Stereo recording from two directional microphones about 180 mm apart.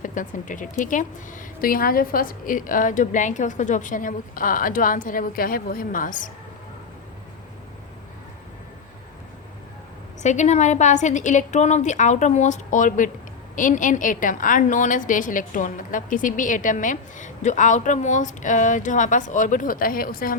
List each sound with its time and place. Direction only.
0.0 s a woman's voice: 45° left (ahead or behind)
10.2 s a woman's voice: 40° left (ahead or behind)